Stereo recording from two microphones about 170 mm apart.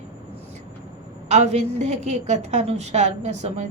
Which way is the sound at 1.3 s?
45° right (ahead or behind).